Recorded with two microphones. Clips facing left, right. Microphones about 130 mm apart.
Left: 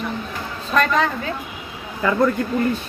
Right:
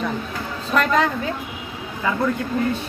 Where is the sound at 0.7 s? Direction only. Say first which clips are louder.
Even; 5° right (ahead or behind).